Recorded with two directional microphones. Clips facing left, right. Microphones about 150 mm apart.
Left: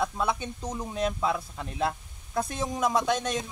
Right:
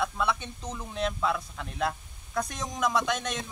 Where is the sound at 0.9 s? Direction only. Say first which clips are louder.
Left 1 dB; 40° left (ahead or behind).